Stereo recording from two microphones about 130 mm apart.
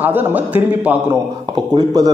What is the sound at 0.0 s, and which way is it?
Speech, 15° right (ahead or behind).